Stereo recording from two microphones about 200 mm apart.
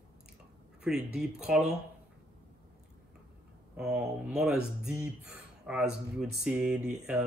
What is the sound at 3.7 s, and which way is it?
Speech, 5° right (ahead or behind).